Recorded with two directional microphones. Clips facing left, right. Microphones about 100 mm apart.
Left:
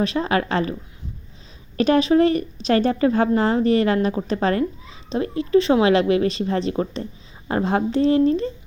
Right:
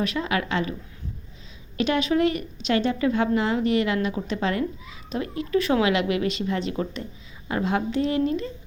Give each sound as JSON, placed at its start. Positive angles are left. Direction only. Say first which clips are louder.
{"t": 0.0, "sound": "a woman's voice", "louder": "left 5 dB", "side_deg": 35}